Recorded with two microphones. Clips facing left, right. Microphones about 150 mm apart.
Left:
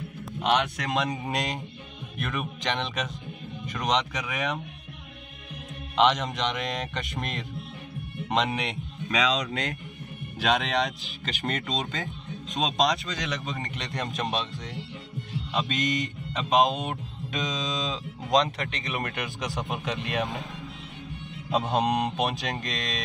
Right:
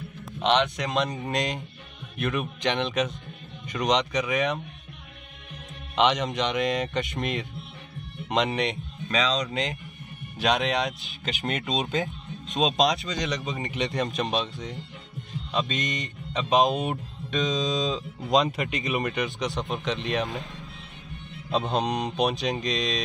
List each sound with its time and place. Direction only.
0.4 s speech: 5° left (ahead or behind)
5.9 s speech: centre (ahead or behind)
11.6 s speech: 20° right (ahead or behind)
12.5 s speech: centre (ahead or behind)
21.5 s speech: 5° left (ahead or behind)